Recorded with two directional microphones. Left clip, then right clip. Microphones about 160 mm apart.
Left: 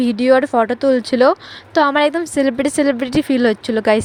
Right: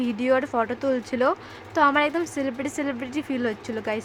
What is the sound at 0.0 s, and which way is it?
Speech, 35° left (ahead or behind).